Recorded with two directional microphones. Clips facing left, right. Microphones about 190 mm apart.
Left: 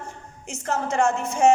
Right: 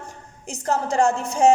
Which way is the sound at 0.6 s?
35° right (ahead or behind).